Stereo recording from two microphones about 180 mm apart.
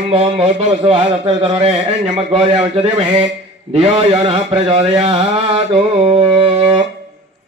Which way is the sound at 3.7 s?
30° right (ahead or behind).